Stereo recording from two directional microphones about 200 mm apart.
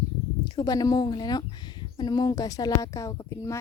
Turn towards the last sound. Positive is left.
turn(degrees=15)  # may be behind; listen again after turning